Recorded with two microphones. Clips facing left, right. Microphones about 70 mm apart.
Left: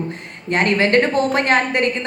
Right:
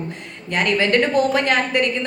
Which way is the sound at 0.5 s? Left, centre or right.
Left.